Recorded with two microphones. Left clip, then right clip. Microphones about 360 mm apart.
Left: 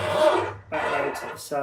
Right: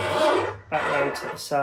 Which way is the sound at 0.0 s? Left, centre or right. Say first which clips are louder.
Left 1 dB; centre.